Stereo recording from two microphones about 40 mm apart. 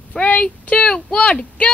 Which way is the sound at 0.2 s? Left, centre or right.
Left.